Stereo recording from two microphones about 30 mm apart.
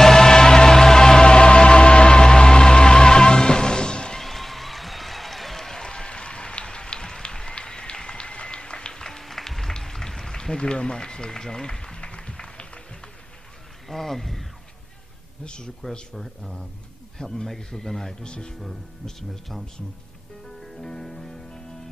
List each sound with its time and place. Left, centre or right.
0.0 s music: centre
4.2 s a sound: centre
5.6 s a sound: centre
8.9 s music: centre
9.8 s rain: centre
10.6 s run: left
12.0 s music: left
13.8 s a sound: centre
15.4 s a man's voice: left
17.5 s a man's voice: centre
18.2 s speech: left
19.0 s a man's voice: centre
20.6 s music: centre